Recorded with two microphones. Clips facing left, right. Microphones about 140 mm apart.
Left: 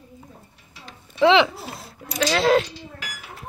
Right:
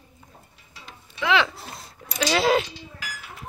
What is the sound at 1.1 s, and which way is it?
Speech, 30° left (ahead or behind).